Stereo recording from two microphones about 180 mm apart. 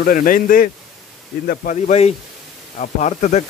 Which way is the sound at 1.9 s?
35° left (ahead or behind).